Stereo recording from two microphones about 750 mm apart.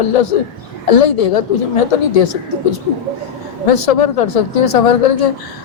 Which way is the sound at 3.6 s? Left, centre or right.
Left.